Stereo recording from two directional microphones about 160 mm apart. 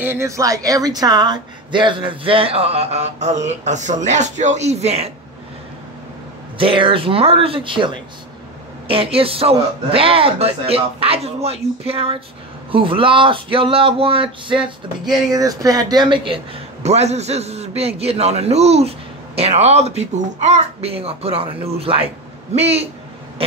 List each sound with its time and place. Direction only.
0.0 s a woman's voice: 15° right (ahead or behind); by 5.1 s 40° right (ahead or behind)
6.6 s a man's voice: 35° right (ahead or behind)
15.3 s a man's voice: 20° right (ahead or behind); by 22.8 s 40° right (ahead or behind)